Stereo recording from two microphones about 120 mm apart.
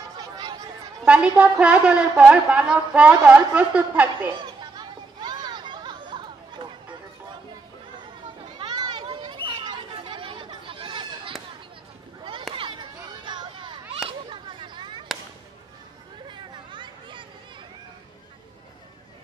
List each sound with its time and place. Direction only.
0.2 s chatter: 30° right (ahead or behind)
1.0 s a woman's voice: 10° right (ahead or behind)
4.7 s chatter: 35° right (ahead or behind)
8.5 s children playing: 35° right (ahead or behind)
12.2 s a sound: 45° right (ahead or behind)
14.0 s children playing: 45° right (ahead or behind)
16.3 s a sound: 40° right (ahead or behind)